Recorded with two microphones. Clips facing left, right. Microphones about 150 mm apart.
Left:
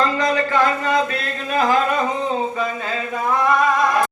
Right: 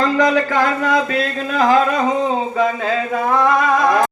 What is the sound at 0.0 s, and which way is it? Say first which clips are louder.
Speech: right 4 dB; 90° right.